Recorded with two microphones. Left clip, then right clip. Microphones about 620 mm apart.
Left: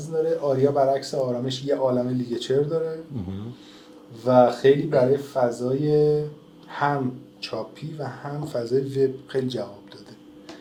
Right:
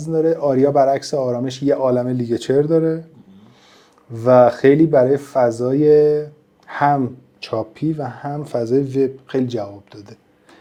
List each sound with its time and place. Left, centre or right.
0.1 s speech: right
4.2 s speech: right